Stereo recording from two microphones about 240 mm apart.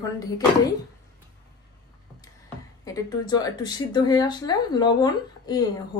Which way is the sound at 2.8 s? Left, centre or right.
Centre.